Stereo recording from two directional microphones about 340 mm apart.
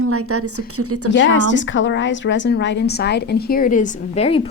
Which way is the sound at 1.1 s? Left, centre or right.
Left.